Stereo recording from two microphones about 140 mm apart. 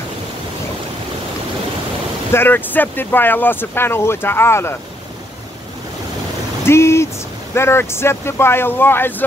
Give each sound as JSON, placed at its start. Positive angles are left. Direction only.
{"t": 2.3, "sound": "speech", "side_deg": 15}
{"t": 6.6, "sound": "speech", "side_deg": 20}